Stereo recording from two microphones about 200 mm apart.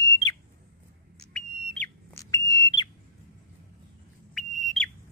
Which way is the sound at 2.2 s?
15° left (ahead or behind).